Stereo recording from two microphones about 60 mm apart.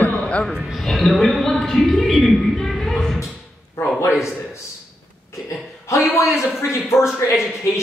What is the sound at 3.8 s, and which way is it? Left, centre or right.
Speech, left.